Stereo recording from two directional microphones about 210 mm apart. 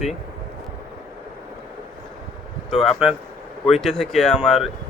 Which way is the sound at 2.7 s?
Centre (ahead or behind).